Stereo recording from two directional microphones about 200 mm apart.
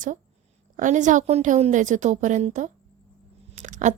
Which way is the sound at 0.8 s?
40° right (ahead or behind).